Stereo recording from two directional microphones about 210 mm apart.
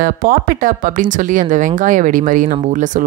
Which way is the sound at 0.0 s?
40° right (ahead or behind).